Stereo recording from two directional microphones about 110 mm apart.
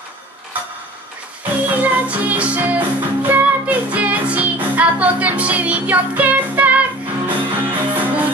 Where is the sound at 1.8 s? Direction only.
15° right (ahead or behind).